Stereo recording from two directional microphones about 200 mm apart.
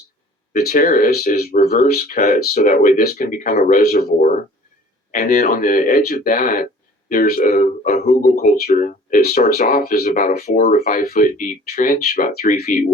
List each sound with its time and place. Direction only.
0.5 s speech: 50° left (ahead or behind)